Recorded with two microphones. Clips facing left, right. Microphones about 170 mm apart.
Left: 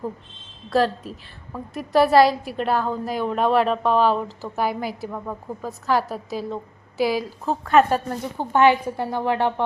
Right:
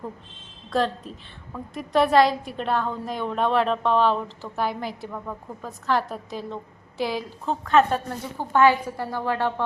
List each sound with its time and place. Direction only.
0.7 s a woman's voice: 5° left (ahead or behind)
8.4 s a woman's voice: 20° left (ahead or behind)